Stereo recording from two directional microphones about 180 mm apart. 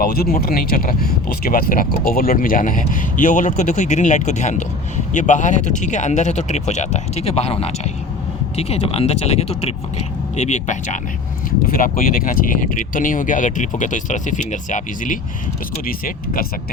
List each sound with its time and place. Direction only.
0.0 s speech: 55° left (ahead or behind)